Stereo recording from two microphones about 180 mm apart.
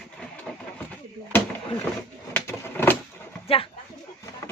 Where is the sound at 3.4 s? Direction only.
30° left (ahead or behind).